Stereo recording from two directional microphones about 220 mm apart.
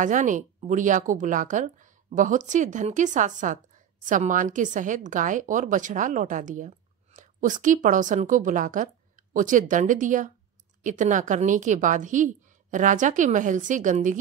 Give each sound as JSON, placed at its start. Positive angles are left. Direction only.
{"t": 0.0, "sound": "speech", "side_deg": -35}